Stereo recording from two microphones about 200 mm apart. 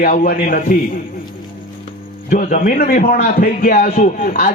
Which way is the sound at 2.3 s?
40° left (ahead or behind).